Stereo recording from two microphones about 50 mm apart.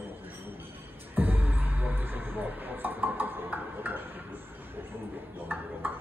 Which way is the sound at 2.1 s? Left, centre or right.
Right.